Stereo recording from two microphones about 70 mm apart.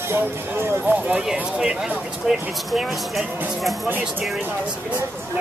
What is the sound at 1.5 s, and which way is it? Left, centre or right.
Speech, centre.